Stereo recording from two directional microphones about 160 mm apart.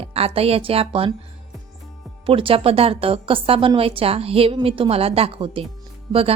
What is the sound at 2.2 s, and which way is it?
Speech, 35° right (ahead or behind).